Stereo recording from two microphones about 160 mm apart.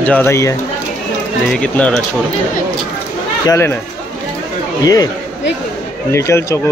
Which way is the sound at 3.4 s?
15° left (ahead or behind).